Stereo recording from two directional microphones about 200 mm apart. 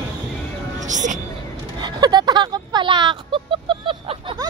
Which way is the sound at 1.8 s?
20° right (ahead or behind).